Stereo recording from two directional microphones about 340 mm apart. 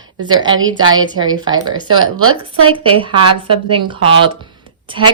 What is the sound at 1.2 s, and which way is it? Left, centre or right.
Speech, centre.